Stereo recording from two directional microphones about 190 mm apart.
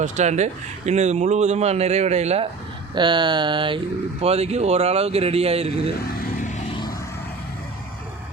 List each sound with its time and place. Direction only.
0.0 s speech: 35° right (ahead or behind)
2.9 s speech: 25° right (ahead or behind)